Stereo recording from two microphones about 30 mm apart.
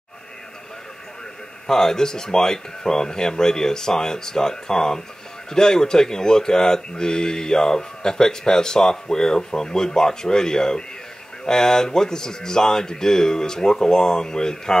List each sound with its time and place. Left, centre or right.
1.7 s a man's voice: centre